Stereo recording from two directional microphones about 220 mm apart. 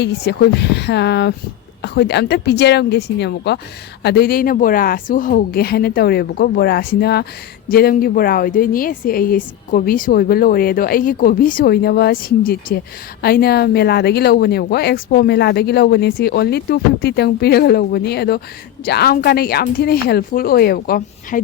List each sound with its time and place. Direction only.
0.0 s a woman's voice: 50° left (ahead or behind)